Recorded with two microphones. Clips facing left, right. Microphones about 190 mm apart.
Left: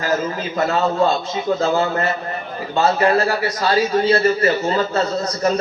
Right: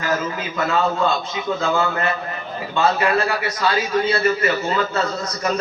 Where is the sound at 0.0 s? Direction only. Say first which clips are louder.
Left 2 dB; 35° left (ahead or behind).